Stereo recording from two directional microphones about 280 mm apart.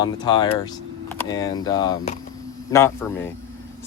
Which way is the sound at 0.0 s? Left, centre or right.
Centre.